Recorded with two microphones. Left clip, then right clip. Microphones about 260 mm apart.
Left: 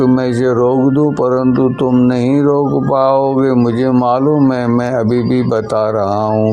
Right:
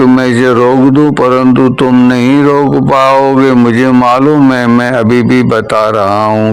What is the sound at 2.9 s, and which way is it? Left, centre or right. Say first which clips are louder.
A man's voice: right 5 dB; right.